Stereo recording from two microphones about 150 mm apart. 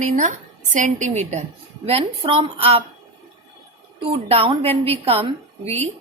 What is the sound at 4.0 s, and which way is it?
A woman's voice, 40° right (ahead or behind).